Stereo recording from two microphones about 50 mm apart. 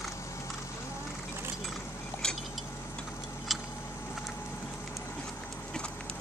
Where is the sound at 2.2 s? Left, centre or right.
Centre.